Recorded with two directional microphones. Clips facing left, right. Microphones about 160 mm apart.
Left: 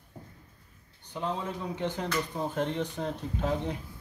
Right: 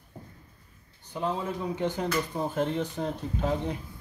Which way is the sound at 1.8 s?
10° right (ahead or behind).